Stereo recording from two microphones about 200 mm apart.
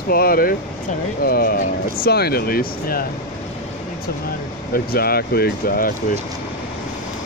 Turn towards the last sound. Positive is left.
turn(degrees=45)  # may be behind; listen again after turning